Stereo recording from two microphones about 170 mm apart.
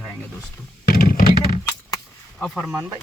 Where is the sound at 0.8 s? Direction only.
55° left (ahead or behind).